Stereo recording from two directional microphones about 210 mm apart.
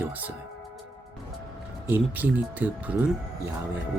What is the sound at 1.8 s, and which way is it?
Speech, 10° right (ahead or behind).